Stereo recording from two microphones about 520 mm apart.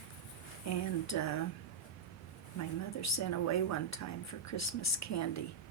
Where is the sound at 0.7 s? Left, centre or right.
Left.